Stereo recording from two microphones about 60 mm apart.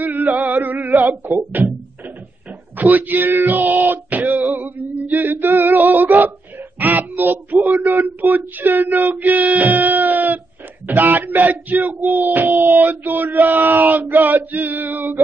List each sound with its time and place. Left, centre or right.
0.0 s a sound: right
1.5 s speech: right
2.8 s a sound: right
6.8 s child singing: right
7.6 s female singing: right
10.9 s speech: right